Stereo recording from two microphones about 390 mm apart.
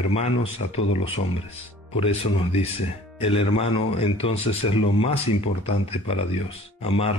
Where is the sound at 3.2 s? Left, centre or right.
Centre.